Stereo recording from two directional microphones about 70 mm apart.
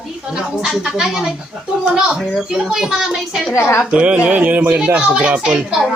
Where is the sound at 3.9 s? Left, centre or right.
Centre.